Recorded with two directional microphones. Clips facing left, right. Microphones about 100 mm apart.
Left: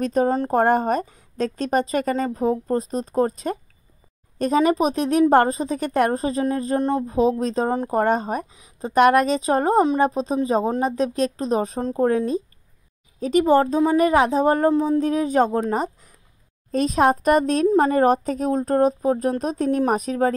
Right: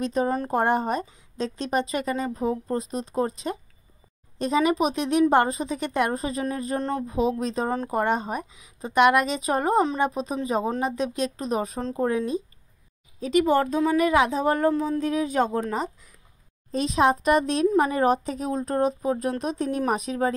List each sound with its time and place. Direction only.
0.0 s a woman's voice: 45° left (ahead or behind)
6.8 s speech: 20° left (ahead or behind)
7.1 s a woman's voice: 35° left (ahead or behind)
13.2 s a woman's voice: 40° left (ahead or behind)
14.7 s a woman's voice: 30° left (ahead or behind)